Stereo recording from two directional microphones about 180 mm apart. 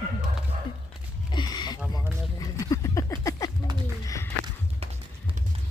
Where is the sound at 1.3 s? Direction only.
25° left (ahead or behind).